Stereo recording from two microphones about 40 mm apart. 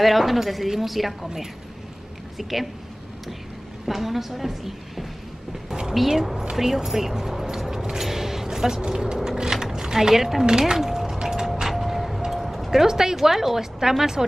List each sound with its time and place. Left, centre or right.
0.0 s a woman's voice: centre
3.8 s a woman's voice: centre
8.0 s a sound: centre
10.8 s music: centre
12.3 s speech: centre